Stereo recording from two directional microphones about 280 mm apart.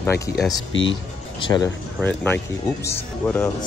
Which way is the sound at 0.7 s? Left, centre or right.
Left.